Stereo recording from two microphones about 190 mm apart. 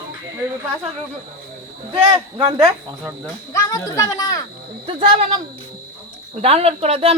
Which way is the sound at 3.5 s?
20° left (ahead or behind).